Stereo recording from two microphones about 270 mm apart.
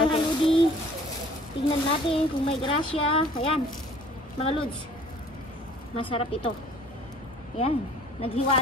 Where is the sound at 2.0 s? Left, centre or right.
Centre.